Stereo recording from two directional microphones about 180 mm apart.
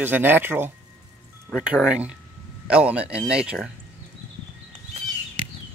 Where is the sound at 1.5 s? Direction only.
Centre (ahead or behind).